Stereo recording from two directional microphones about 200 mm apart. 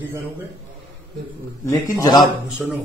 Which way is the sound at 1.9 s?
20° left (ahead or behind).